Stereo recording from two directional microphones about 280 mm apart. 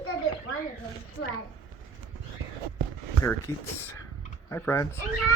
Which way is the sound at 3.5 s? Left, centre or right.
Centre.